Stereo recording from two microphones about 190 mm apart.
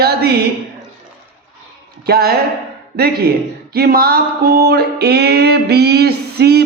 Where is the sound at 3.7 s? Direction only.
55° right (ahead or behind).